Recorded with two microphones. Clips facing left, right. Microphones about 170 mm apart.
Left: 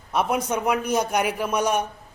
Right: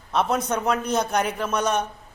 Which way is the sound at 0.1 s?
10° left (ahead or behind).